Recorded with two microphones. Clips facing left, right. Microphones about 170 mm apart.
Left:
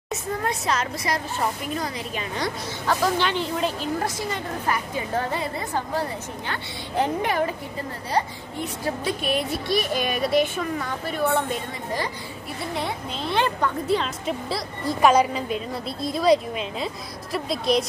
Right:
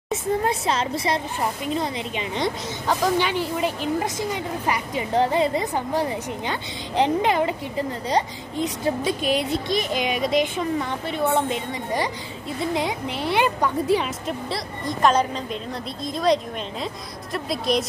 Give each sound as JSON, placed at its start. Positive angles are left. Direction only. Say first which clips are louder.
{"t": 0.1, "sound": "a woman's voice", "louder": "right 4 dB", "side_deg": -30}
{"t": 12.7, "sound": "a woman's voice", "louder": "right 4 dB", "side_deg": -15}
{"t": 14.2, "sound": "a woman's voice", "louder": "left 1 dB", "side_deg": 5}